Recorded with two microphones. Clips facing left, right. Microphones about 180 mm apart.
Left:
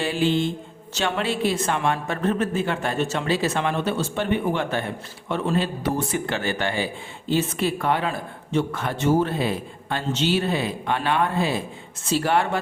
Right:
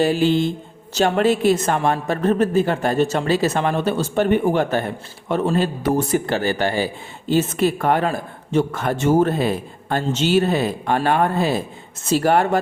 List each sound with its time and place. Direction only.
0.0 s speech: 40° right (ahead or behind)